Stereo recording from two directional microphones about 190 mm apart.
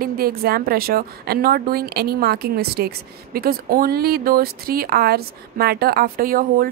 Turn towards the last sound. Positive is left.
turn(degrees=-50)  # may be behind; listen again after turning